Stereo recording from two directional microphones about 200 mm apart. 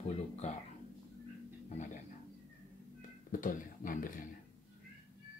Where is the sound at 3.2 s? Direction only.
45° left (ahead or behind).